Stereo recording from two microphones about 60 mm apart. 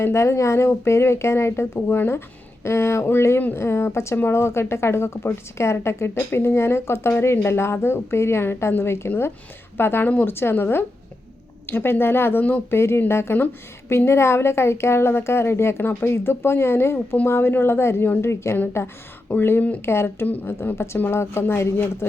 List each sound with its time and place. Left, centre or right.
0.0 s speech: left
12.7 s speech: left
19.3 s speech: left
20.2 s speech: left